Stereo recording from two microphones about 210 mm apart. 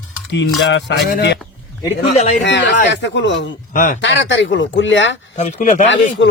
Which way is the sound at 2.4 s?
55° left (ahead or behind).